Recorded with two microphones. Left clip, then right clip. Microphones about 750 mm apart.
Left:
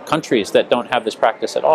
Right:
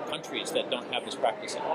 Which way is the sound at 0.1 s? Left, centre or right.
Left.